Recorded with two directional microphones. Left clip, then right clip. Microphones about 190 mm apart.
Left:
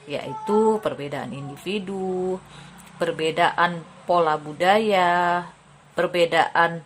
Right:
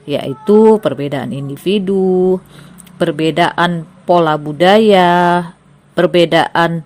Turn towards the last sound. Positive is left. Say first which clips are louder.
# right 7 dB
turn(degrees=-35)  # may be behind; listen again after turning